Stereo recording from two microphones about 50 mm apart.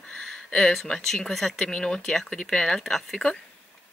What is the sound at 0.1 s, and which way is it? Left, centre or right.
Speech, centre.